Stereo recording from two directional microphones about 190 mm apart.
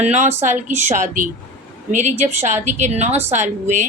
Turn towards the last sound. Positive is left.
turn(degrees=-40)  # may be behind; listen again after turning